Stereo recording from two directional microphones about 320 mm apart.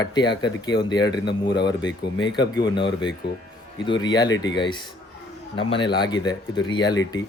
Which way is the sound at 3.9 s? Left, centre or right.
Left.